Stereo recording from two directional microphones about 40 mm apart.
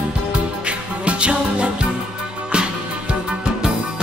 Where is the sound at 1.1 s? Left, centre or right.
Right.